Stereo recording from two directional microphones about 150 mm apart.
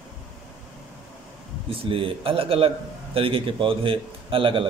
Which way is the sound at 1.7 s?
35° right (ahead or behind).